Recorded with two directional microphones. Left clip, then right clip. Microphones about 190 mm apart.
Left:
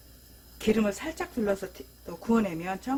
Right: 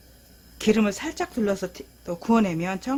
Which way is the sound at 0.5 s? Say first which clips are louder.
Right 4 dB; 35° right (ahead or behind).